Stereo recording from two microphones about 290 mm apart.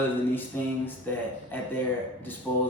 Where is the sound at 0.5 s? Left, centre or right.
Centre.